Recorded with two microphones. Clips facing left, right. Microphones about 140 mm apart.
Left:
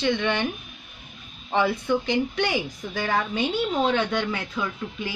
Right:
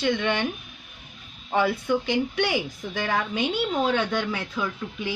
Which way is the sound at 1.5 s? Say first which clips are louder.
Even; 5° right (ahead or behind).